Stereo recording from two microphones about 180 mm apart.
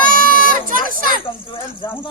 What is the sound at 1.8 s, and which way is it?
Speech, 25° left (ahead or behind).